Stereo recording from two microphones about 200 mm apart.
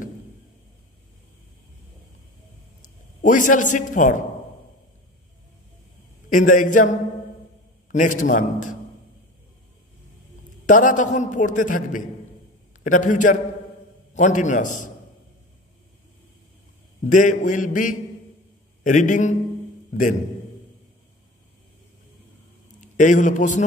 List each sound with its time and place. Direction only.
3.2 s a man's voice: 40° left (ahead or behind)
6.3 s a man's voice: 40° left (ahead or behind)
10.7 s a man's voice: 40° left (ahead or behind)
17.0 s a man's voice: 40° left (ahead or behind)
22.8 s a man's voice: 40° left (ahead or behind)